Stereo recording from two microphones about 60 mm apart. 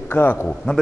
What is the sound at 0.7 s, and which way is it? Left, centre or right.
Speech, centre.